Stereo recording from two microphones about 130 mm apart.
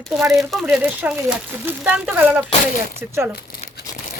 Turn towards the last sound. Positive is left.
turn(degrees=-20)  # may be behind; listen again after turning